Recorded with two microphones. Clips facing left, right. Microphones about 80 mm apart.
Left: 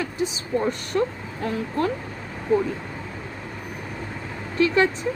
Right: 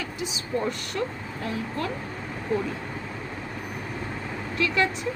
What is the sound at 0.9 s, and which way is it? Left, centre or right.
Speech, left.